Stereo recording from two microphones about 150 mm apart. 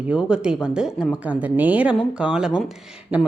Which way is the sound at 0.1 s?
5° right (ahead or behind).